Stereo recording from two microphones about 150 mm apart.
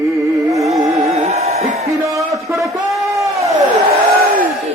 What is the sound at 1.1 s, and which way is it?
Music, 50° right (ahead or behind).